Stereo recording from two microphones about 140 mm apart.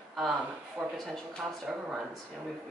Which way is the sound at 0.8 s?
10° right (ahead or behind).